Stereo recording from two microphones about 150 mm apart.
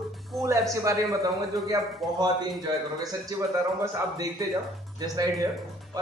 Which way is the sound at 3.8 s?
25° right (ahead or behind).